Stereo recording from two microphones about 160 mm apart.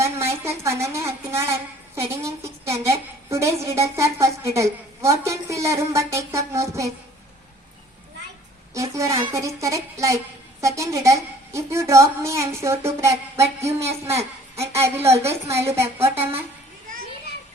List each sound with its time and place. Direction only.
0.0 s a sound: 15° right (ahead or behind)
0.6 s a woman's voice: 20° right (ahead or behind)
8.7 s a woman's voice: 20° right (ahead or behind)
14.2 s a child's voice: 40° right (ahead or behind)
14.7 s a woman's voice: 15° right (ahead or behind)